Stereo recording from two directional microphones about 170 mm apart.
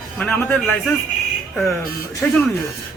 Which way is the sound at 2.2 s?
5° left (ahead or behind).